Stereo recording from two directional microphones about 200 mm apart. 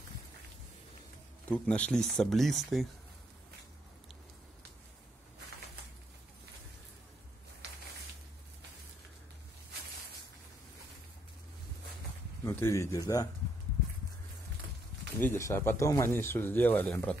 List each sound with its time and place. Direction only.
1.5 s speech: 5° left (ahead or behind)
12.4 s speech: 10° left (ahead or behind)
15.1 s speech: 10° left (ahead or behind)